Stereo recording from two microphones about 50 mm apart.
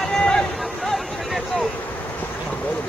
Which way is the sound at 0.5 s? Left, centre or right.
Centre.